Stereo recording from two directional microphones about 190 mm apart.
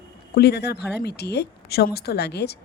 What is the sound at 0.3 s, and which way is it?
Speech, 60° left (ahead or behind).